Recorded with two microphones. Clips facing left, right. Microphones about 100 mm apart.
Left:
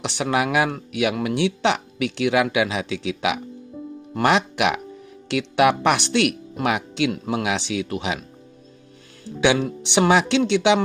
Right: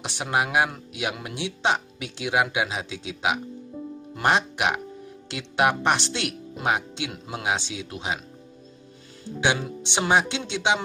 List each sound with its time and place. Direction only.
0.0 s speech: 75° left (ahead or behind)
5.3 s speech: 75° left (ahead or behind)
9.2 s speech: 75° left (ahead or behind)